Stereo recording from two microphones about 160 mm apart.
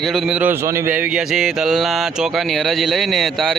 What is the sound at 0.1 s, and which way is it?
A man's voice, 5° right (ahead or behind).